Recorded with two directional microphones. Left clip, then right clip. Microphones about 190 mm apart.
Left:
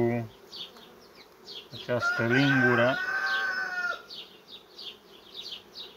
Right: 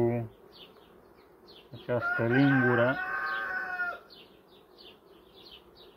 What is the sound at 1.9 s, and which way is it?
Speech, centre (ahead or behind).